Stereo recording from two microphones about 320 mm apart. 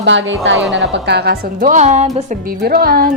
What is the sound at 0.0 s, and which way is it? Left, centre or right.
A woman's voice, right.